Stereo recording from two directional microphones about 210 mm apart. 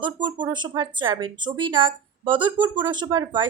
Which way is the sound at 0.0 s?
20° right (ahead or behind).